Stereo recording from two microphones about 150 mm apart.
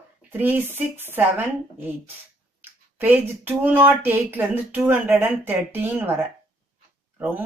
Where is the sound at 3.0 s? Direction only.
10° right (ahead or behind).